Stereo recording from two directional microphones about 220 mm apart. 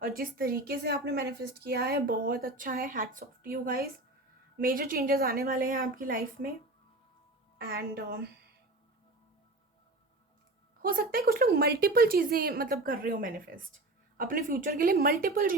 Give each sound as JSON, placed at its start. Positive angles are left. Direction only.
{"t": 0.0, "sound": "a woman's voice", "side_deg": -40}
{"t": 7.6, "sound": "a woman's voice", "side_deg": -45}
{"t": 10.8, "sound": "a woman's voice", "side_deg": -40}